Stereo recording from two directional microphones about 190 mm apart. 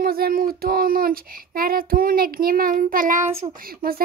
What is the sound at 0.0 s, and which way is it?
Child singing, 50° right (ahead or behind).